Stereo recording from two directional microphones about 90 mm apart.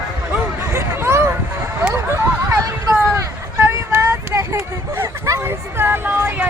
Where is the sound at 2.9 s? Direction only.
25° right (ahead or behind).